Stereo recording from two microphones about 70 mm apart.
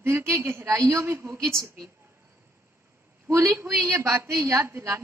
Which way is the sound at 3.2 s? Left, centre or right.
Right.